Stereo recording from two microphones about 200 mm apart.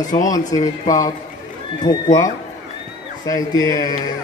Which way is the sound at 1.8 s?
20° left (ahead or behind).